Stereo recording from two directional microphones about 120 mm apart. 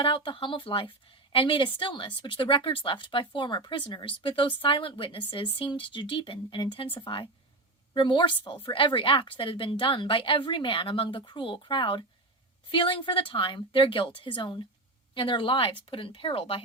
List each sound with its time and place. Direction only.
0.0 s a woman's voice: 45° left (ahead or behind)